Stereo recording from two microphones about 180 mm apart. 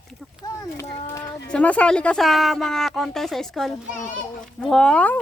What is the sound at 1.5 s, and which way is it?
A woman's voice, 5° left (ahead or behind).